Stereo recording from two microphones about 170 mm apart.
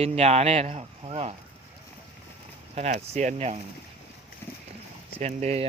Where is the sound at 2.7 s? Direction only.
40° right (ahead or behind).